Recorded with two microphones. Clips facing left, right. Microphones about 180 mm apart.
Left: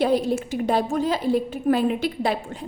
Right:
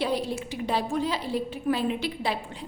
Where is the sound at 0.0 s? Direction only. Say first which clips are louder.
Left 7 dB; 45° left (ahead or behind).